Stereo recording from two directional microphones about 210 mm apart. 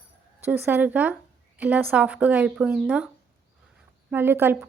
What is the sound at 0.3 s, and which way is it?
Speech, 10° right (ahead or behind).